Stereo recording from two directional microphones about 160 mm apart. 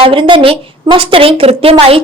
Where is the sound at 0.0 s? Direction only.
35° right (ahead or behind).